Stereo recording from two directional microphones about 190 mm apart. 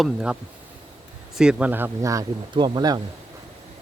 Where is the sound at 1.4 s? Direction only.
5° right (ahead or behind); by 3.0 s 20° right (ahead or behind).